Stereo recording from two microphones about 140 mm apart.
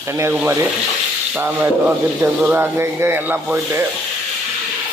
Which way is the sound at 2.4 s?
15° right (ahead or behind).